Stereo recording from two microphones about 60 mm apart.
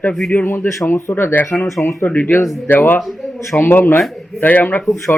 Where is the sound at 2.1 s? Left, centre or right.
Left.